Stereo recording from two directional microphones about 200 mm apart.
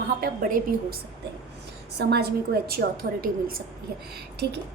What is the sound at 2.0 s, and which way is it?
A woman's voice, 55° right (ahead or behind).